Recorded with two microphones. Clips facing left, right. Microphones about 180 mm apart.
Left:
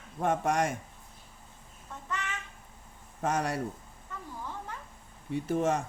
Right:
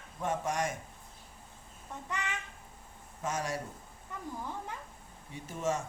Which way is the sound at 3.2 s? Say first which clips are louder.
Left 5 dB; 60° left (ahead or behind).